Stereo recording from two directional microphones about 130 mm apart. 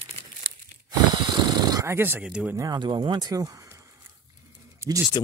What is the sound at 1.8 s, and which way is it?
Speech, 20° right (ahead or behind).